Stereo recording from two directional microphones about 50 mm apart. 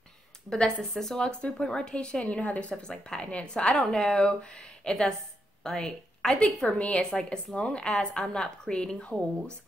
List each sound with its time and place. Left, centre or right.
0.5 s speech: centre
2.7 s speech: centre
6.4 s speech: left